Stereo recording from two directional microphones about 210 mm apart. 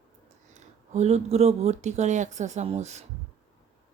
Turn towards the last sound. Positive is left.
turn(degrees=-30)  # may be behind; listen again after turning